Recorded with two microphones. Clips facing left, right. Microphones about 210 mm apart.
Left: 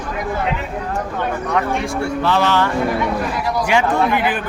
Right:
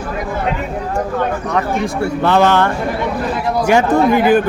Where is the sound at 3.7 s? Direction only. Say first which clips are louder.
Right 6 dB; 45° right (ahead or behind).